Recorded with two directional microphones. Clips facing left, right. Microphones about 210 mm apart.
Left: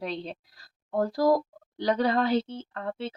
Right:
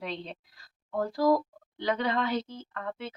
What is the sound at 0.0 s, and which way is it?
A woman's voice, 40° left (ahead or behind).